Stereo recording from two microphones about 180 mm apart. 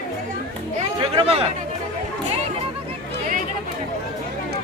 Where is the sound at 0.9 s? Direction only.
30° right (ahead or behind).